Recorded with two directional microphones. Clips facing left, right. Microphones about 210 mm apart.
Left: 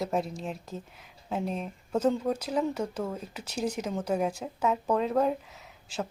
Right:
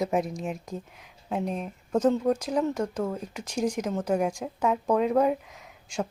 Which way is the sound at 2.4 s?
5° left (ahead or behind).